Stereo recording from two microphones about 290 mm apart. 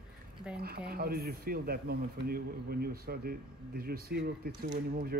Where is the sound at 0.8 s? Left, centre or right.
Right.